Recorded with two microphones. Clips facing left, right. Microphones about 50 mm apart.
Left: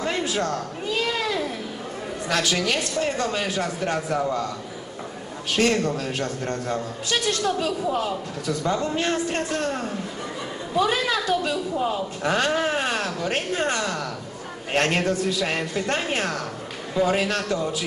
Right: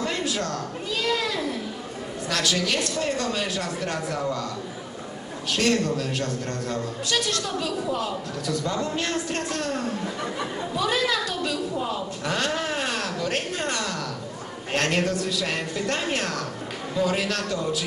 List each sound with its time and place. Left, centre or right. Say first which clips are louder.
0.0 s a sound: left 2 dB; left
2.2 s a man's voice: left 2 dB; left
5.6 s a man's voice: left 2 dB; left